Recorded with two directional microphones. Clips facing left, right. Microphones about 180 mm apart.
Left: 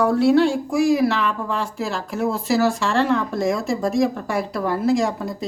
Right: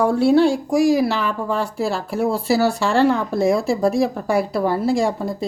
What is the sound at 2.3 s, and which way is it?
Speech, 35° right (ahead or behind).